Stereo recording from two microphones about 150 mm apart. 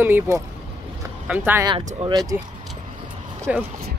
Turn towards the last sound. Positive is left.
turn(degrees=-10)  # may be behind; listen again after turning